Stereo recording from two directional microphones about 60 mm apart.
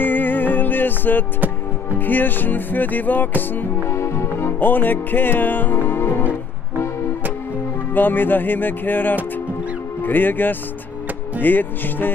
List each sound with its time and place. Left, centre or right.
0.0 s music: left
3.9 s music: left
7.9 s music: left